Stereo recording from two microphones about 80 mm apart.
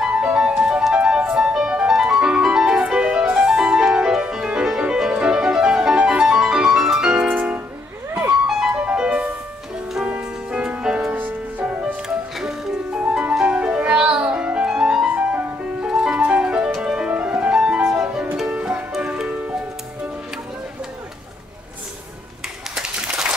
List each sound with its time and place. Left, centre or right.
0.0 s music: centre
7.2 s music: right
8.5 s music: centre
11.1 s music: right
15.0 s music: centre
22.8 s a sound: centre